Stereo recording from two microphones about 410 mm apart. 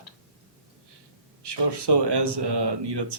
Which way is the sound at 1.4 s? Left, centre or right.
Right.